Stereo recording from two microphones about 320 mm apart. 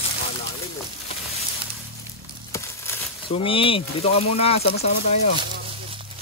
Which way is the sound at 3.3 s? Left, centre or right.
Centre.